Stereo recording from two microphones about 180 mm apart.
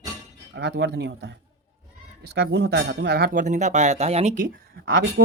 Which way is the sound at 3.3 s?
40° right (ahead or behind).